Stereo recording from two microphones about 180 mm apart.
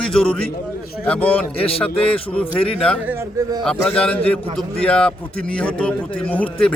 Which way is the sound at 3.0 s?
15° right (ahead or behind).